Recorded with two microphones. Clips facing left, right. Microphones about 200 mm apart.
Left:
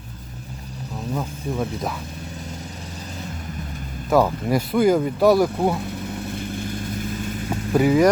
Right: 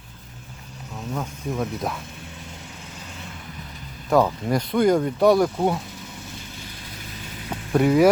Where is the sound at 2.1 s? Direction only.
40° left (ahead or behind).